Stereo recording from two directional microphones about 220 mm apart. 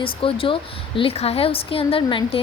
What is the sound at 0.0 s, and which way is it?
A woman's voice, 25° left (ahead or behind).